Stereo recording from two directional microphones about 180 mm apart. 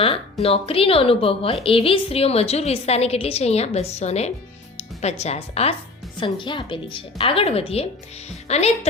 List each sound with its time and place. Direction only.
0.0 s a woman's voice: 30° left (ahead or behind)